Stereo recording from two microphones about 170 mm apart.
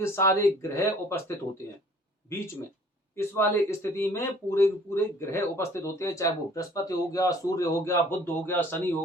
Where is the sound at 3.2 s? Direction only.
15° left (ahead or behind).